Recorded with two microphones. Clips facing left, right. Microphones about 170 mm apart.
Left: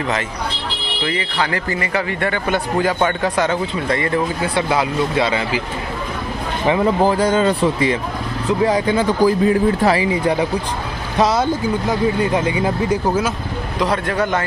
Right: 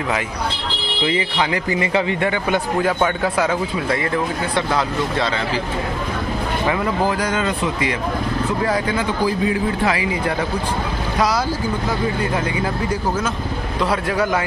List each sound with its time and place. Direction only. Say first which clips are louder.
1.0 s a man's voice: right 1 dB; 15° right (ahead or behind)
2.8 s speech: left 3 dB; centre (ahead or behind)
4.6 s speech: left 3 dB; 5° left (ahead or behind)
6.7 s speech: left 7 dB; 30° left (ahead or behind)
8.5 s speech: left 6 dB; 20° left (ahead or behind)
9.2 s speech: left 6 dB; 45° left (ahead or behind)
9.9 s speech: left 4 dB; 25° left (ahead or behind)
13.8 s a man's voice: even; 5° right (ahead or behind)